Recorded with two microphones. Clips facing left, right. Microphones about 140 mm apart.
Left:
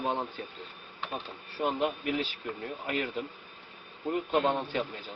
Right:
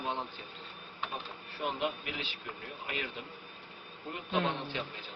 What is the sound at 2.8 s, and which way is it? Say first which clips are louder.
Speech: left 6 dB; 45° left (ahead or behind).